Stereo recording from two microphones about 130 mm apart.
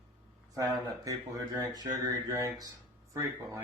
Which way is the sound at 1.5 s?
25° right (ahead or behind).